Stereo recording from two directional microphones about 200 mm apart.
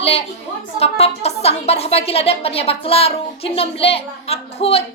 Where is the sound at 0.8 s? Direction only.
30° left (ahead or behind).